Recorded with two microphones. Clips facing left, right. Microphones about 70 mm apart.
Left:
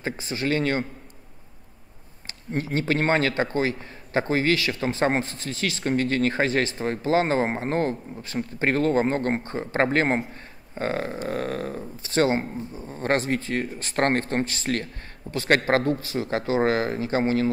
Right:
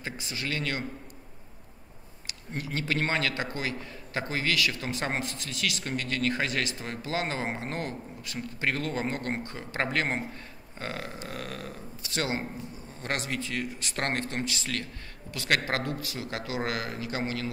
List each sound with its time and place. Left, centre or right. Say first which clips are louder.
0.0 s a man's voice: left 8 dB; left
2.2 s a man's voice: left 8 dB; left